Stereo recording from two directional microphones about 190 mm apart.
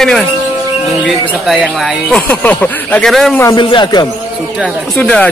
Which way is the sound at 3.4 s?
20° left (ahead or behind).